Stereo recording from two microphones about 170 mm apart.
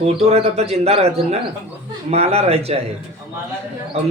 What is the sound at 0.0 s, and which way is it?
Speech, 40° right (ahead or behind).